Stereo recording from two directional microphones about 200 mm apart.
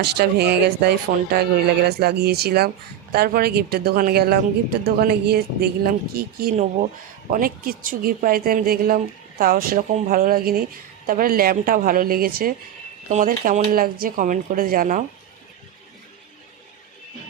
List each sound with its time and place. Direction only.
0.0 s speech: 55° right (ahead or behind)